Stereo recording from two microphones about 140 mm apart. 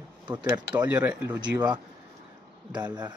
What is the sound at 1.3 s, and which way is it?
Speech, 30° right (ahead or behind).